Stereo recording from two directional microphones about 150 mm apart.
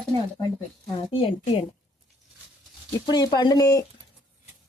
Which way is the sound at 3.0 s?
25° left (ahead or behind).